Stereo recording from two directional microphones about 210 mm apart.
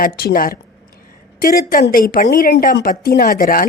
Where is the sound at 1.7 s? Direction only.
45° left (ahead or behind).